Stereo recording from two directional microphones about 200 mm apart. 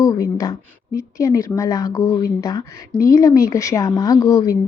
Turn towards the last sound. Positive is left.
turn(degrees=20)  # may be behind; listen again after turning